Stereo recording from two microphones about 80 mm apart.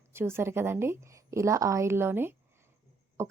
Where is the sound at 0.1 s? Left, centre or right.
Right.